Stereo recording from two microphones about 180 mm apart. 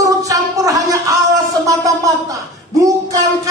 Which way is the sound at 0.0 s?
20° right (ahead or behind).